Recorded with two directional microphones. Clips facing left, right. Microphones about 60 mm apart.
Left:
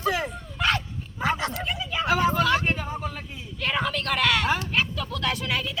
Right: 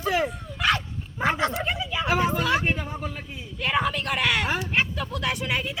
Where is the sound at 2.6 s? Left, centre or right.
Centre.